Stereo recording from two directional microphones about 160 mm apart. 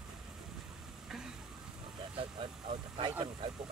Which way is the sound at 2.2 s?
35° right (ahead or behind).